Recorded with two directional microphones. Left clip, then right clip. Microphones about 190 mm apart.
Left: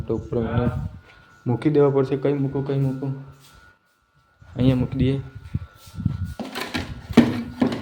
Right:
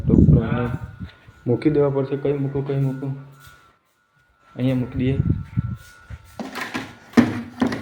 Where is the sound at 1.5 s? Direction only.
20° left (ahead or behind).